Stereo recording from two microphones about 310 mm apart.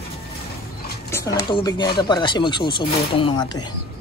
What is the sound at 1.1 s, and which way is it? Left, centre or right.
Speech, centre.